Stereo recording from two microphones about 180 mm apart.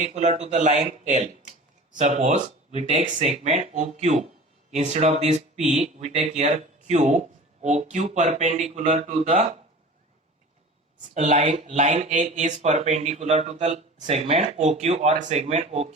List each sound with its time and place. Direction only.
0.0 s speech: 40° right (ahead or behind)
11.1 s speech: 40° right (ahead or behind)